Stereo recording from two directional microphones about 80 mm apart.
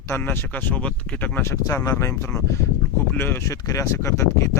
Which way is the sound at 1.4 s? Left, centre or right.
Left.